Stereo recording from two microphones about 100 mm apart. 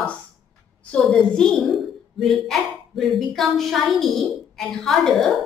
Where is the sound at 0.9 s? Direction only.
5° left (ahead or behind).